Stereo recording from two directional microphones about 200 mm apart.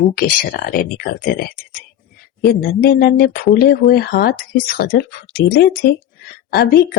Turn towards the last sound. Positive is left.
turn(degrees=50)  # may be behind; listen again after turning